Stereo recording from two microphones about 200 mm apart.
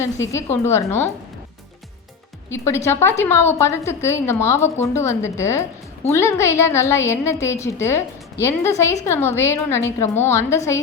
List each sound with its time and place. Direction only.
0.0 s a woman's voice: 15° left (ahead or behind)
2.5 s a woman's voice: 15° left (ahead or behind)